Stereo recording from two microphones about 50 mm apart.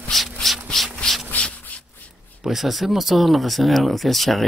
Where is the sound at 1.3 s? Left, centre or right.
Left.